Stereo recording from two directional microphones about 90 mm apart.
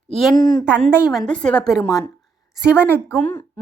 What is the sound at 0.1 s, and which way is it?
Speech, centre (ahead or behind).